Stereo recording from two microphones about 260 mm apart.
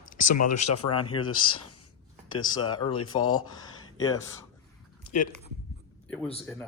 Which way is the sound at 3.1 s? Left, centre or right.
Left.